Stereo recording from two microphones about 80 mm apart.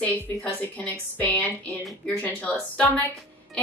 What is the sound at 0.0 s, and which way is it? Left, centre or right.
A woman's voice, centre.